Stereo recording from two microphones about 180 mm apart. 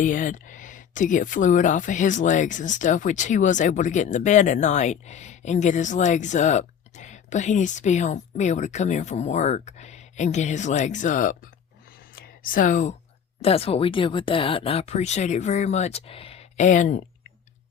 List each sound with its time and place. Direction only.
0.0 s speech: 45° left (ahead or behind)